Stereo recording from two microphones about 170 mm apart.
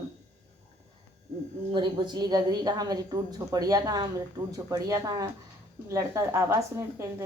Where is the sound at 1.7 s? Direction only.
25° right (ahead or behind).